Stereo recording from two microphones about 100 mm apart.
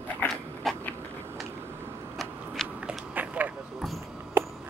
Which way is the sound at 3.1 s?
15° right (ahead or behind).